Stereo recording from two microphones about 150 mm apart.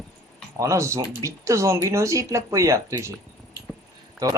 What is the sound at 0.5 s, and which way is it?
Speech, 20° right (ahead or behind).